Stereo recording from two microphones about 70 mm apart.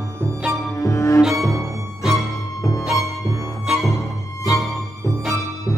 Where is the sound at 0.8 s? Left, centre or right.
Left.